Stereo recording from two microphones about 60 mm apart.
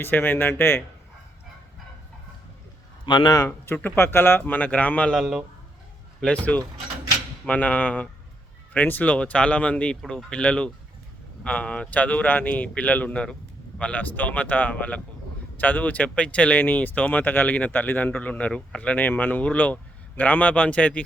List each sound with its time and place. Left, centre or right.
0.0 s a man's voice: left
3.9 s a man's voice: left
5.1 s a man's voice: centre
6.2 s speech: left